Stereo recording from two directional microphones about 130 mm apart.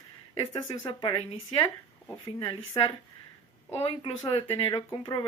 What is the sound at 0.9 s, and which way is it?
Speech, 40° left (ahead or behind).